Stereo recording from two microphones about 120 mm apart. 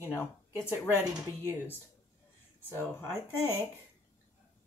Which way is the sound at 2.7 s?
20° left (ahead or behind).